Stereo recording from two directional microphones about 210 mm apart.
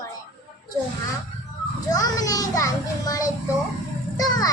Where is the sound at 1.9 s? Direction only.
15° left (ahead or behind).